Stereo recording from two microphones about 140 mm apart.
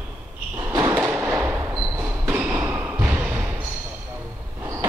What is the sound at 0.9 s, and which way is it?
Fireworks, 10° right (ahead or behind).